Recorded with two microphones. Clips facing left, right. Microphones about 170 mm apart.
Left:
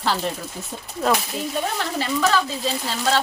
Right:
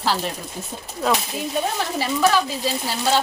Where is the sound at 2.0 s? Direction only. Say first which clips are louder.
Right 2 dB; 10° right (ahead or behind).